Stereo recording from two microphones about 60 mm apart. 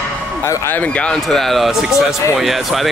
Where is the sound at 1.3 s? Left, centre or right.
Centre.